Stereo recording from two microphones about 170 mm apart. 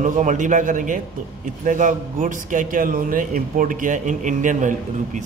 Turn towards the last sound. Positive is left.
turn(degrees=-50)  # may be behind; listen again after turning